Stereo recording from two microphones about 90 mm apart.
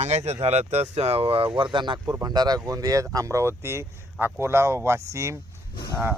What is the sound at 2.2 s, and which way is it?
Speech, 45° right (ahead or behind).